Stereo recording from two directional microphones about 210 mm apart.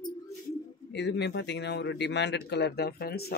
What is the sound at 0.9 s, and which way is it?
Speech, 55° left (ahead or behind).